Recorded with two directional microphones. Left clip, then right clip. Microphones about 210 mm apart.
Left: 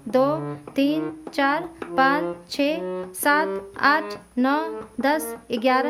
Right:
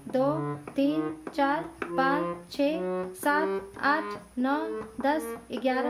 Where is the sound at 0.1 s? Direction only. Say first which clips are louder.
Left 6 dB; 45° left (ahead or behind).